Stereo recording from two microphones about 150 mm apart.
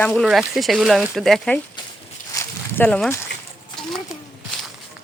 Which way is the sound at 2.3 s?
15° left (ahead or behind).